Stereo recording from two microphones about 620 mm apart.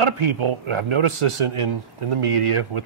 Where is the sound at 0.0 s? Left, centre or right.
Right.